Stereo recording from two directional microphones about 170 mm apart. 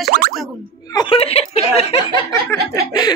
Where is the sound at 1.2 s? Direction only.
35° left (ahead or behind).